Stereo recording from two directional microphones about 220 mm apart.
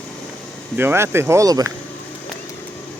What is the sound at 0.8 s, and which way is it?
Speech, 10° right (ahead or behind).